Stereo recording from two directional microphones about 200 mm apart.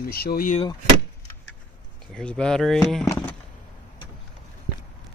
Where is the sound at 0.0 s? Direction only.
50° left (ahead or behind).